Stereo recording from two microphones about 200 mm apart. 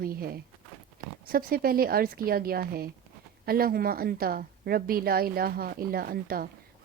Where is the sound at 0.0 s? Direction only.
45° right (ahead or behind).